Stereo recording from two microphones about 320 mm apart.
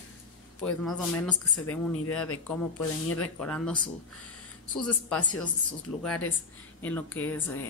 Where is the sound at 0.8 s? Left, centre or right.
Centre.